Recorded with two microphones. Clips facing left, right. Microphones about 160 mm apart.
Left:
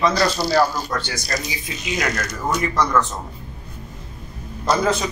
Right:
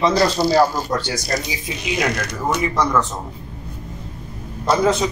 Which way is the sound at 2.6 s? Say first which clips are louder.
Even; 15° right (ahead or behind).